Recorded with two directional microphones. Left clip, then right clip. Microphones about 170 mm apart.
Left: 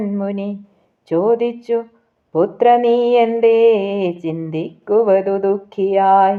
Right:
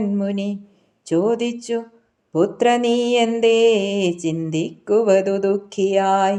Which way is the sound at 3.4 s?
20° right (ahead or behind).